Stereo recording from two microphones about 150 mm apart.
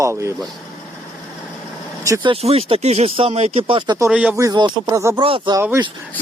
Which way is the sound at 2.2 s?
40° right (ahead or behind).